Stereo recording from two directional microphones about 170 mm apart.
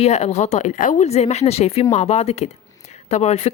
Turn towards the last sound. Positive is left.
turn(degrees=40)  # may be behind; listen again after turning